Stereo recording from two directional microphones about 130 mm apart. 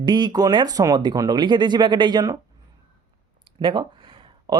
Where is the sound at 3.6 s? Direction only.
40° right (ahead or behind).